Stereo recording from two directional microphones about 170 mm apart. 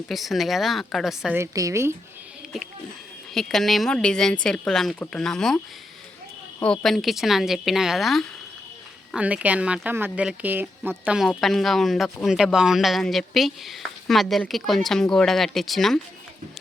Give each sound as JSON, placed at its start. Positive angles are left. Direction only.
{"t": 0.1, "sound": "speech", "side_deg": 0}
{"t": 1.4, "sound": "speech", "side_deg": -20}
{"t": 3.3, "sound": "speech", "side_deg": 0}
{"t": 6.6, "sound": "speech", "side_deg": 5}